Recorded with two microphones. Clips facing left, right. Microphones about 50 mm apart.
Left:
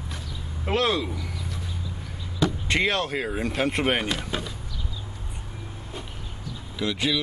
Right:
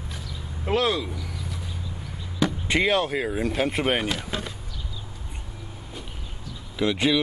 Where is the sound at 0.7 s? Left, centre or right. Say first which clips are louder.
Even; centre.